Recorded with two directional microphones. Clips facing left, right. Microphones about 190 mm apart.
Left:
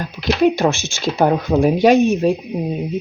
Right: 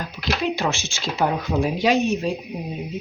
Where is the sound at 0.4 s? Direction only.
45° left (ahead or behind).